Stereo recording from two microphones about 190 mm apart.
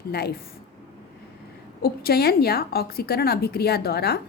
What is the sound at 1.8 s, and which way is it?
A woman's voice, 55° left (ahead or behind).